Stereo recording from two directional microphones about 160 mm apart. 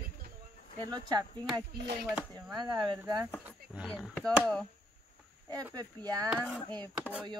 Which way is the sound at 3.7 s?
Centre (ahead or behind).